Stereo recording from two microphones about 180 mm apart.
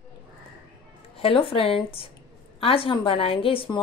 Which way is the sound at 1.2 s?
30° left (ahead or behind).